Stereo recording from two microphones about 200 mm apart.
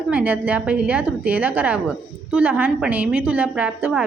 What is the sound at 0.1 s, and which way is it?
A woman's voice, 10° right (ahead or behind).